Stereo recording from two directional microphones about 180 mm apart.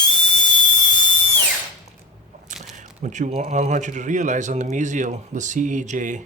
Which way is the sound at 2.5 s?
45° right (ahead or behind).